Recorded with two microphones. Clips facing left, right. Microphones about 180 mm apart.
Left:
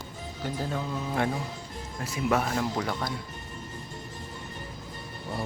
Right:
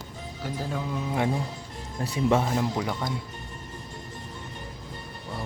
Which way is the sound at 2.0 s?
30° right (ahead or behind).